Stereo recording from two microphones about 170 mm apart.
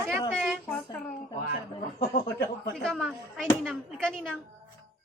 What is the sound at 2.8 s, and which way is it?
Speech, centre (ahead or behind).